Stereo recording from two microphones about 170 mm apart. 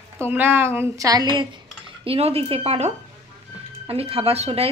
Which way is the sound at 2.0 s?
35° right (ahead or behind).